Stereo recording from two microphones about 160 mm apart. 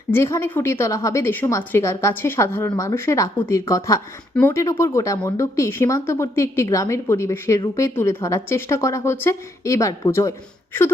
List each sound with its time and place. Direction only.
0.1 s speech: 15° left (ahead or behind)